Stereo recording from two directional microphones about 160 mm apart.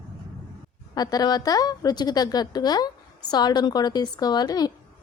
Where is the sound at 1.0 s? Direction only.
25° left (ahead or behind).